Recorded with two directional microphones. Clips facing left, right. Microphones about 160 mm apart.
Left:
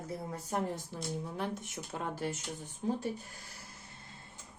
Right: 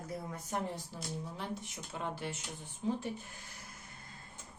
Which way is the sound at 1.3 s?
50° left (ahead or behind).